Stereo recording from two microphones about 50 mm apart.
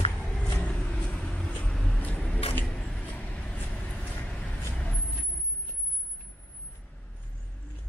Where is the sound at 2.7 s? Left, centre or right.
Centre.